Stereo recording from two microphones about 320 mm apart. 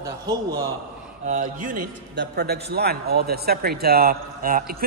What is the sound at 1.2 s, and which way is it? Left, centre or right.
A man's voice, right.